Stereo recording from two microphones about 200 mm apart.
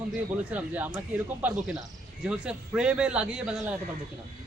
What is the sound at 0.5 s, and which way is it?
A man's voice, 5° right (ahead or behind).